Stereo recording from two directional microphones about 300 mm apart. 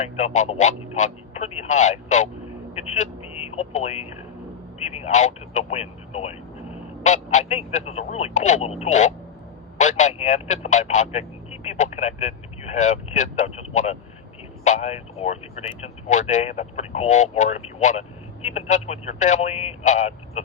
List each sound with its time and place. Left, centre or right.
0.0 s speech: left